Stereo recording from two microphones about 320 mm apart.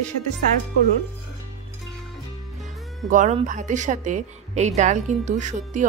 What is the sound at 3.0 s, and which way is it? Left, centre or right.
Speech, right.